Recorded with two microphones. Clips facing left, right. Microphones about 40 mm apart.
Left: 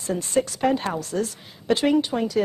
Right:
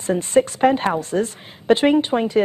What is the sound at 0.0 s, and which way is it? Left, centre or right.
A woman's voice, right.